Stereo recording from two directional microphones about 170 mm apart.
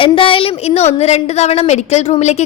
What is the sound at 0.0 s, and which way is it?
A woman's voice, 30° left (ahead or behind).